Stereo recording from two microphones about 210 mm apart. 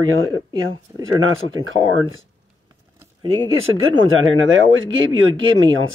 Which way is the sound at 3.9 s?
70° right (ahead or behind).